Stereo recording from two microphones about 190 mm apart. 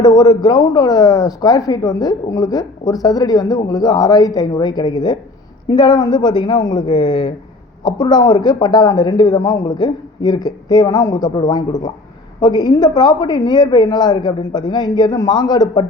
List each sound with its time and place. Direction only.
0.0 s speech: 20° left (ahead or behind)